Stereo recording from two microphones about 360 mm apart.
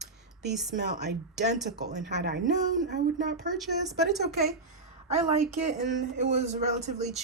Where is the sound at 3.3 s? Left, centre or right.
Centre.